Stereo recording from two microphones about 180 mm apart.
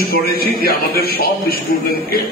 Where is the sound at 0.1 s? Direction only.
55° left (ahead or behind).